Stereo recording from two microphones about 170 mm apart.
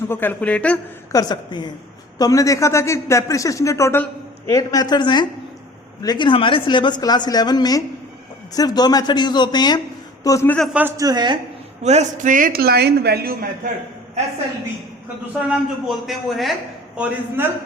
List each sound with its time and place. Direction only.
0.1 s a man's voice: 10° left (ahead or behind)
1.1 s a woman's voice: 25° left (ahead or behind)
10.8 s a woman's voice: 15° right (ahead or behind)
11.8 s a man's voice: 40° right (ahead or behind); by 13.3 s 70° right (ahead or behind)
15.4 s a man's voice: 5° right (ahead or behind)
17.0 s a man's voice: 15° right (ahead or behind)